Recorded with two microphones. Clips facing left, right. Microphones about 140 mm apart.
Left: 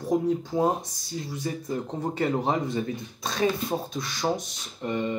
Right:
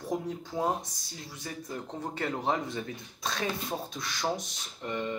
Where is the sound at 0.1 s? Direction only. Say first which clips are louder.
Left 9 dB; 15° left (ahead or behind).